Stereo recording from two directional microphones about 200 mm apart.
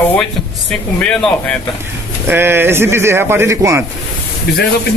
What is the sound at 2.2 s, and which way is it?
Speech, 10° right (ahead or behind).